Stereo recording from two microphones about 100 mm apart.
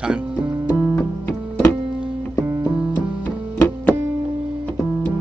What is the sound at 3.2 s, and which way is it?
Music, 20° left (ahead or behind).